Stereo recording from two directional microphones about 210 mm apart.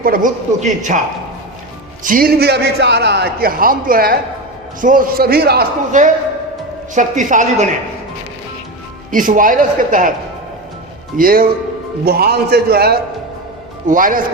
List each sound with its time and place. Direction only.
0.0 s a man's voice: 40° right (ahead or behind)
2.0 s a man's voice: 45° right (ahead or behind)
9.1 s a man's voice: 40° right (ahead or behind)
11.2 s a man's voice: 45° right (ahead or behind)